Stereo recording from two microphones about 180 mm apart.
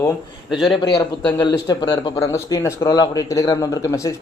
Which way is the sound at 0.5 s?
Centre (ahead or behind).